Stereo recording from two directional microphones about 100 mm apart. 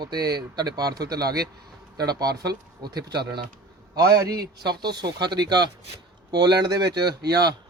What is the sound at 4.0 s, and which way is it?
Speech, 35° right (ahead or behind).